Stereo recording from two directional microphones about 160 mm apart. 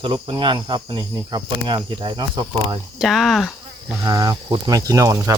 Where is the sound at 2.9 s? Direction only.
Centre (ahead or behind).